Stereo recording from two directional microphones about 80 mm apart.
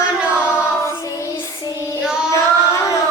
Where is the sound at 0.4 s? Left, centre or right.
Left.